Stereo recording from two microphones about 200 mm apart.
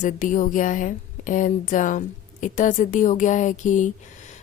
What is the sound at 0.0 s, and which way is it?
Speech, 40° left (ahead or behind).